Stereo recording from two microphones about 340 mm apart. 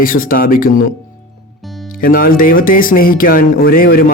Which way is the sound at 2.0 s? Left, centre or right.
Left.